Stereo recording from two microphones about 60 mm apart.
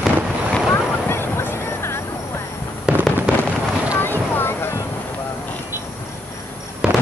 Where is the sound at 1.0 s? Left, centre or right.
Left.